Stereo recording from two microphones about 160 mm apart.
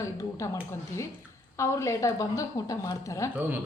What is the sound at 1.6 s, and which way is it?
A woman's voice, 15° left (ahead or behind).